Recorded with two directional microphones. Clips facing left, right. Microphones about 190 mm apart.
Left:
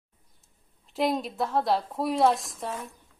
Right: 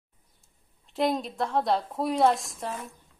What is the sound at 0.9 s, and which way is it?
Speech, centre (ahead or behind).